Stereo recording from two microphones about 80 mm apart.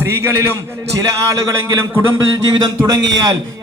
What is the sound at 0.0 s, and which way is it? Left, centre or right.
Speech, right.